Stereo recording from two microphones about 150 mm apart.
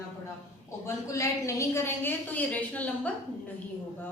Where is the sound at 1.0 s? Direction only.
20° left (ahead or behind).